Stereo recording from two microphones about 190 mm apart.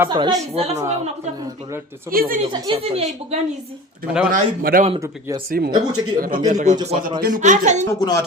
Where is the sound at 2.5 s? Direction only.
30° right (ahead or behind).